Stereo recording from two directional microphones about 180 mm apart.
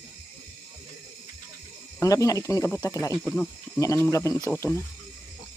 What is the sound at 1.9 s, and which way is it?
Speech, 20° left (ahead or behind).